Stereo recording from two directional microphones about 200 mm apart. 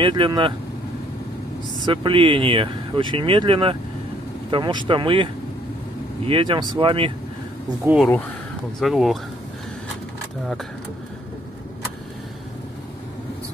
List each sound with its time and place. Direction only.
0.0 s speech: 20° right (ahead or behind)
1.9 s speech: 25° right (ahead or behind)
7.8 s speech: 5° right (ahead or behind)